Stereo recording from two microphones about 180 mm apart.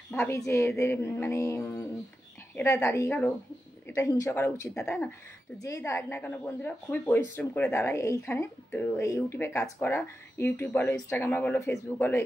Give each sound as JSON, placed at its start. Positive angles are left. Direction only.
{"t": 0.1, "sound": "speech", "side_deg": 10}